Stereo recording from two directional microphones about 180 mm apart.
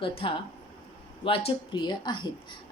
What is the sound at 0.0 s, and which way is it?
A woman's voice, 30° left (ahead or behind).